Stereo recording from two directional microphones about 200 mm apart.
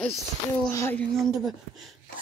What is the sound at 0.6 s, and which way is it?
Speech, 15° left (ahead or behind).